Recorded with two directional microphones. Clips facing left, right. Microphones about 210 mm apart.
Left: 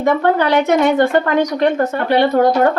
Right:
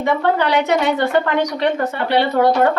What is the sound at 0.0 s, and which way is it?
A woman's voice, 45° left (ahead or behind).